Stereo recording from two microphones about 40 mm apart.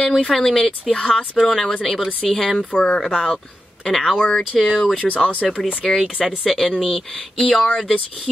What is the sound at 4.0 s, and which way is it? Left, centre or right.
Speech, centre.